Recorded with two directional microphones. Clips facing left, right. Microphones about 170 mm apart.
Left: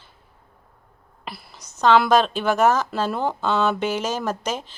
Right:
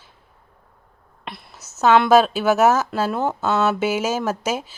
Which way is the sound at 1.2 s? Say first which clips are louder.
Right 1 dB; centre (ahead or behind).